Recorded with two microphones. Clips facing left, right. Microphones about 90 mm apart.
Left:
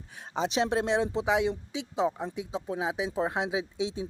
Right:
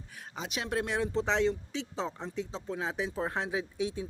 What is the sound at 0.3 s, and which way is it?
Speech, 30° left (ahead or behind).